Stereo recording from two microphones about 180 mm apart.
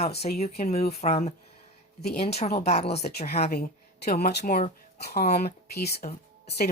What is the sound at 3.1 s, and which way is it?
Speech, 60° left (ahead or behind).